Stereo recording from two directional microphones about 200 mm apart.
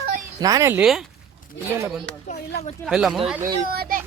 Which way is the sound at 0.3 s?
15° right (ahead or behind).